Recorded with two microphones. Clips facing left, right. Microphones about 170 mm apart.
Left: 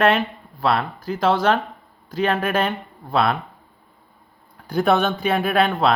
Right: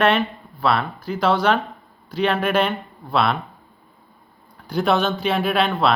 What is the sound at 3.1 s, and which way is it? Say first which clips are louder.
Speech: even; 45° left (ahead or behind).